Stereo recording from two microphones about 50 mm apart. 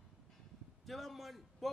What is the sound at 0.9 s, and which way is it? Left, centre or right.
Speech, centre.